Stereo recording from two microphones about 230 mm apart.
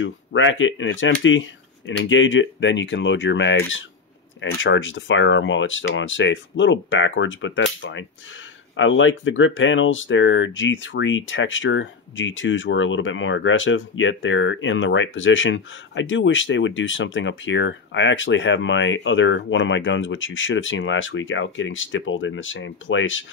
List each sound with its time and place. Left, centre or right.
0.0 s speech: left